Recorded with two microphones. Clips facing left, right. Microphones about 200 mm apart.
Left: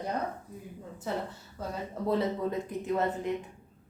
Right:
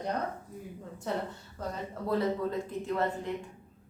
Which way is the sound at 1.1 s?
5° left (ahead or behind).